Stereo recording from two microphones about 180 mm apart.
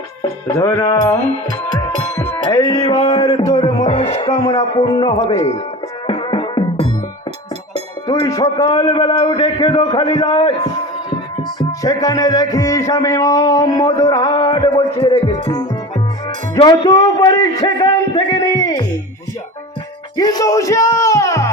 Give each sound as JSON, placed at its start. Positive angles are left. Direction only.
{"t": 0.2, "sound": "music", "side_deg": 20}
{"t": 2.9, "sound": "music", "side_deg": 35}
{"t": 3.2, "sound": "a sound", "side_deg": 20}
{"t": 3.8, "sound": "music", "side_deg": 35}
{"t": 8.0, "sound": "music", "side_deg": 20}
{"t": 16.6, "sound": "speech", "side_deg": 25}
{"t": 18.1, "sound": "music", "side_deg": 20}
{"t": 20.1, "sound": "speech", "side_deg": 20}